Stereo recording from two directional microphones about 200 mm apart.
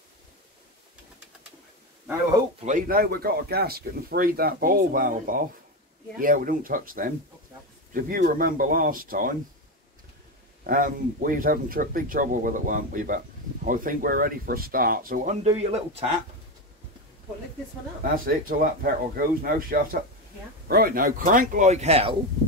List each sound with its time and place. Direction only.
2.6 s speech: 45° right (ahead or behind)
10.6 s speech: 45° right (ahead or behind)
15.4 s speech: 30° right (ahead or behind)
18.0 s speech: 45° right (ahead or behind)